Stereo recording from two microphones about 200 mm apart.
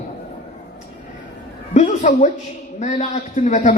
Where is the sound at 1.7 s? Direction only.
35° left (ahead or behind).